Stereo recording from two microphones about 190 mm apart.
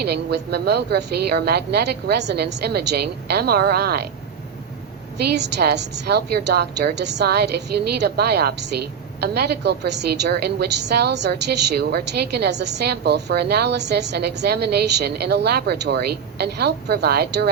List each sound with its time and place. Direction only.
0.0 s a woman's voice: 60° right (ahead or behind)
5.1 s a woman's voice: 60° right (ahead or behind)